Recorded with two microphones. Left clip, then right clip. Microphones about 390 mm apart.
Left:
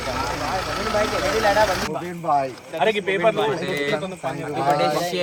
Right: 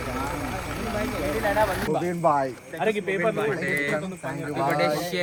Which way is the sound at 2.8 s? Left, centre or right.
Left.